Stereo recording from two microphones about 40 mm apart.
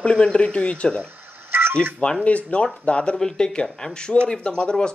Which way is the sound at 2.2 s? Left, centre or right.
Left.